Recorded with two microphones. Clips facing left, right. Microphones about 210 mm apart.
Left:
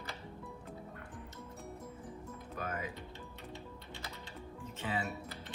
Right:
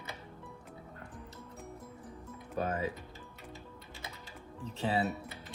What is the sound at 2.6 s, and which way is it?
Speech, 30° right (ahead or behind).